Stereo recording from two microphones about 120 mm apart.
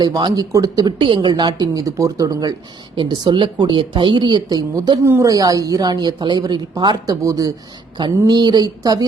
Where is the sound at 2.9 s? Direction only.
40° right (ahead or behind).